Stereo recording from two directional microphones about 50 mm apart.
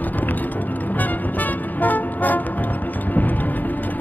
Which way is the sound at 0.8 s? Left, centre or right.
Left.